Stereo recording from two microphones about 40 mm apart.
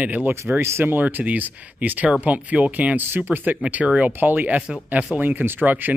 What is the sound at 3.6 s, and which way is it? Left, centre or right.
Speech, right.